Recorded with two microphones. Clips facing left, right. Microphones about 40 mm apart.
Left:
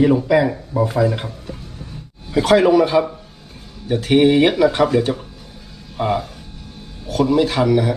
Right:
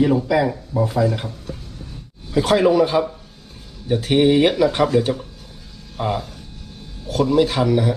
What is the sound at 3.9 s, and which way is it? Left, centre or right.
Speech, centre.